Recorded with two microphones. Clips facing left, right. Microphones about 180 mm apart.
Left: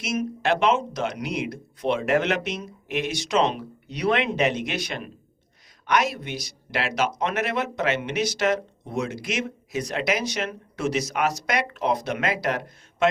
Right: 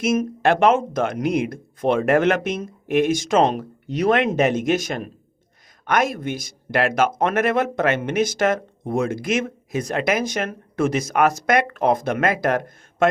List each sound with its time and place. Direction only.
0.0 s speech: 50° right (ahead or behind)